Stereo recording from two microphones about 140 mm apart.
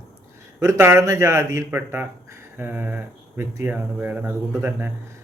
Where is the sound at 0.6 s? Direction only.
20° right (ahead or behind).